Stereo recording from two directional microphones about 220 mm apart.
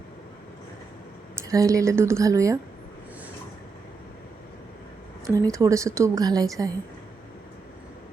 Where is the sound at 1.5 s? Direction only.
15° right (ahead or behind).